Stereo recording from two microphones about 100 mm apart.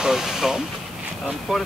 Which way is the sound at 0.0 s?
5° right (ahead or behind).